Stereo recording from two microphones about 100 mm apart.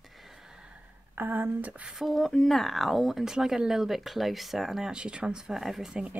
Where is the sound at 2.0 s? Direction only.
Centre (ahead or behind).